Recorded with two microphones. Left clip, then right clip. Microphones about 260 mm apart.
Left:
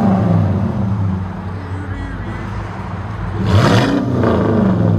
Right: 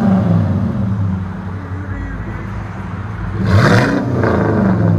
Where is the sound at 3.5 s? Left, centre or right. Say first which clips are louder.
Right 1 dB; centre.